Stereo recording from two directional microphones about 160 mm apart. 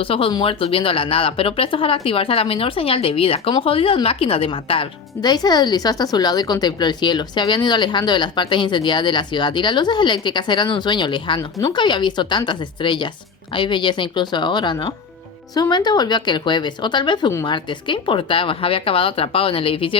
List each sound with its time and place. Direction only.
0.0 s speech: 35° left (ahead or behind)